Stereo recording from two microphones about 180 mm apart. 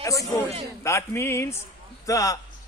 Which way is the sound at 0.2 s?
Centre (ahead or behind).